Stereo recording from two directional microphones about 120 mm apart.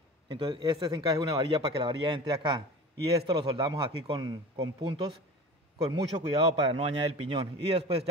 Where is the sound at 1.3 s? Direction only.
50° right (ahead or behind); by 4.8 s 35° right (ahead or behind).